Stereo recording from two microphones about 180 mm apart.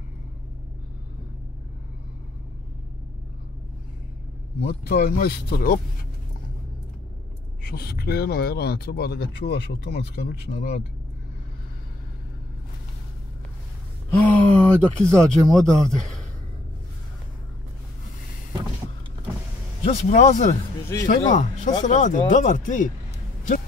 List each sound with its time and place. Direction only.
4.6 s speech: 55° left (ahead or behind)
7.6 s speech: 60° left (ahead or behind)
14.1 s speech: 10° left (ahead or behind)
19.8 s speech: 40° left (ahead or behind)